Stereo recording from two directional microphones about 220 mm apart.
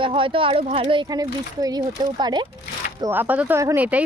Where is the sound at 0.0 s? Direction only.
25° right (ahead or behind).